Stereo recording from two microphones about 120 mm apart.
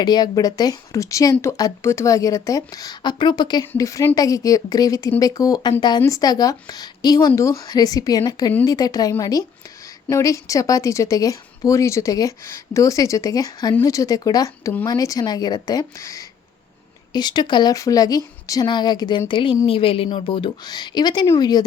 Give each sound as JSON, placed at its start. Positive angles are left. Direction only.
{"t": 0.0, "sound": "a woman's voice", "side_deg": 35}
{"t": 3.8, "sound": "a woman's voice", "side_deg": 25}
{"t": 17.1, "sound": "a woman's voice", "side_deg": 35}